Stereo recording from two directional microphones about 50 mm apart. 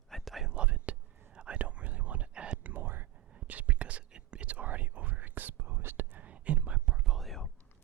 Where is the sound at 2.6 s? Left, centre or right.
Right.